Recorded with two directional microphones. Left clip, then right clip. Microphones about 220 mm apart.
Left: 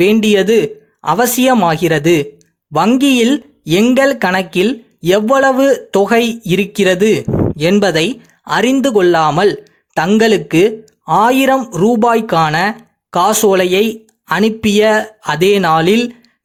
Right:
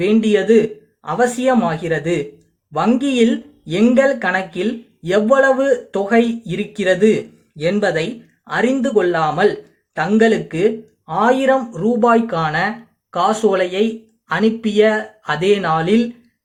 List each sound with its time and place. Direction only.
0.0 s speech: 45° left (ahead or behind)